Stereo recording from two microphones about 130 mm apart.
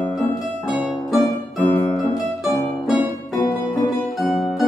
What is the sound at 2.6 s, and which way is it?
Music, centre (ahead or behind).